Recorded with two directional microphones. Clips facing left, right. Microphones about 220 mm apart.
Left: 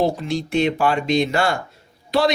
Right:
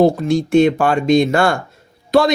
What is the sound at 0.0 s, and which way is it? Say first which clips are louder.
A man's voice: right 7 dB; 50° right (ahead or behind).